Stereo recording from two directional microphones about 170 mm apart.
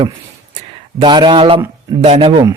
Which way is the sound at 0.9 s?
25° right (ahead or behind).